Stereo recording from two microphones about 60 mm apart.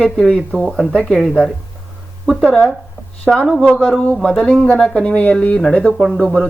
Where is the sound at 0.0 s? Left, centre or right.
Centre.